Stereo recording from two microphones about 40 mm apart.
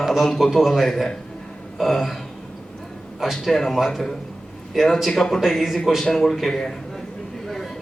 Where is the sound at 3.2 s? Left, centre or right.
Centre.